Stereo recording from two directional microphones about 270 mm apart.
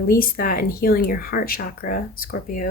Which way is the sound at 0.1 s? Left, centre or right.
Left.